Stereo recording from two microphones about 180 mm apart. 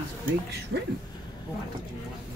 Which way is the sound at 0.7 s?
90° right.